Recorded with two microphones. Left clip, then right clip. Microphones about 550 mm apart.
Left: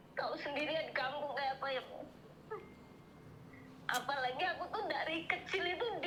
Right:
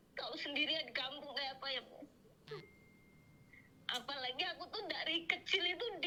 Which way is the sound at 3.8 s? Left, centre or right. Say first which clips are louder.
Left 5 dB; right.